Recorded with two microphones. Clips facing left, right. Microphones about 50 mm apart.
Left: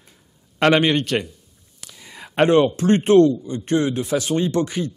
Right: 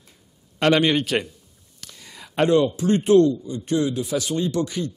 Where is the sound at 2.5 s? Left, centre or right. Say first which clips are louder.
Left 2 dB; left.